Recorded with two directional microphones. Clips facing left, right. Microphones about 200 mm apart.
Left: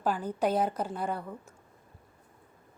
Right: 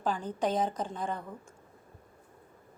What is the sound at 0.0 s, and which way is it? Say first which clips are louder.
A woman's voice: left 2 dB; 10° left (ahead or behind).